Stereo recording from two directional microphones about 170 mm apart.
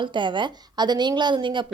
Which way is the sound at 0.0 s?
30° right (ahead or behind).